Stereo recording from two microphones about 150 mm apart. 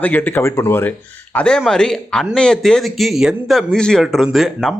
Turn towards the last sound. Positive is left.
turn(degrees=0)  # may be behind; listen again after turning